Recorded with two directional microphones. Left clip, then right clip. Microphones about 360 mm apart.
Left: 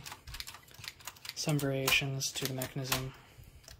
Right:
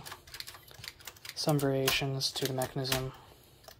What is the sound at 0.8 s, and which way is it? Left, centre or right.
Typing, centre.